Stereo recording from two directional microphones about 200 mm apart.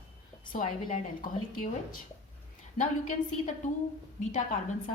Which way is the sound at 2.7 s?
35° left (ahead or behind).